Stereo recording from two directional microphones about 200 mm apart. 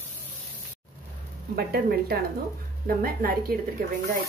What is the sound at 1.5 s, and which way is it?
A woman's voice, 50° right (ahead or behind).